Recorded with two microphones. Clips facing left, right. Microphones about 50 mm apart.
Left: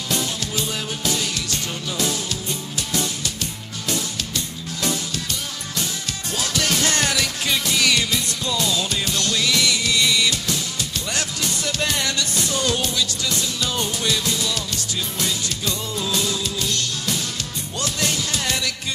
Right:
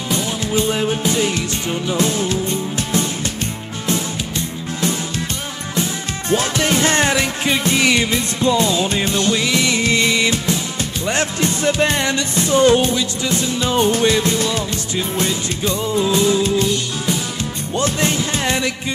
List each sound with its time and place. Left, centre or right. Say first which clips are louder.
0.5 s music: right 9 dB; right
6.3 s music: right 7 dB; right
16.6 s music: right 6 dB; centre